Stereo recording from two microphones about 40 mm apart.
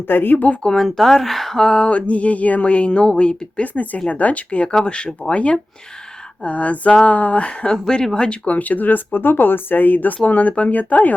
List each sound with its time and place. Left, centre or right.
0.1 s speech: left
0.3 s speech: left
0.6 s speech: centre
1.6 s speech: left
4.1 s speech: left
4.9 s speech: left